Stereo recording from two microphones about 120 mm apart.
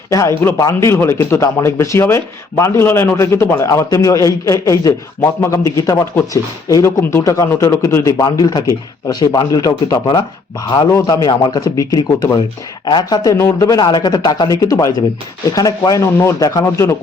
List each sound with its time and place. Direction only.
0.1 s a man's voice: 25° left (ahead or behind)
8.2 s speech: 35° left (ahead or behind)
10.8 s a man's voice: 25° left (ahead or behind)
11.1 s a man's voice: 40° left (ahead or behind)